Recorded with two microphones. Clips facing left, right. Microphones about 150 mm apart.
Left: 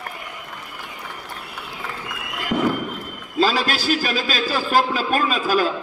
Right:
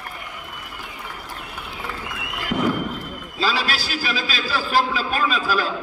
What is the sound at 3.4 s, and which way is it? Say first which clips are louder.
A man's voice: left 4 dB; 45° left (ahead or behind).